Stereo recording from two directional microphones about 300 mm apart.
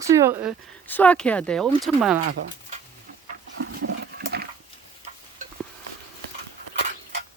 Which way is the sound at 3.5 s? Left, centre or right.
Right.